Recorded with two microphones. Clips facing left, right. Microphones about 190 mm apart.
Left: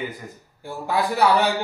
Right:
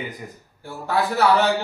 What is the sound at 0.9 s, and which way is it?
Speech, 15° left (ahead or behind).